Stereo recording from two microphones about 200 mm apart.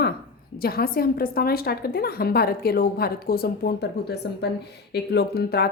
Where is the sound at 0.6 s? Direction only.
50° left (ahead or behind).